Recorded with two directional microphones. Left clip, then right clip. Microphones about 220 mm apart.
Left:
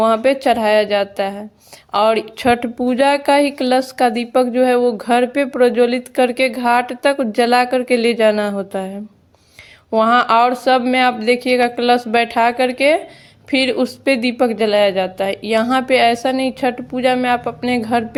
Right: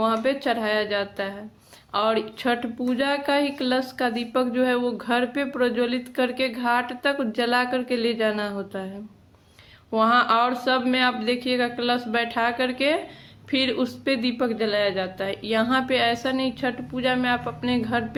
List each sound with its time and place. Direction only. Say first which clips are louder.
0.0 s a woman's voice: left 9 dB; 35° left (ahead or behind)
9.9 s a woman's voice: left 7 dB; 35° left (ahead or behind)